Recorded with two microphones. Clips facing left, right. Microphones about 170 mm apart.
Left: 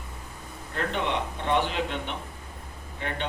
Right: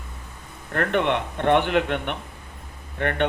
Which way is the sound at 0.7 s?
60° right (ahead or behind).